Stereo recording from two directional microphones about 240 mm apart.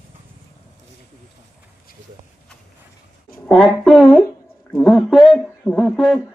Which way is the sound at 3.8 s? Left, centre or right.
Centre.